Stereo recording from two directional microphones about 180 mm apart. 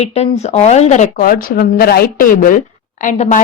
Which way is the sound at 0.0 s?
35° left (ahead or behind).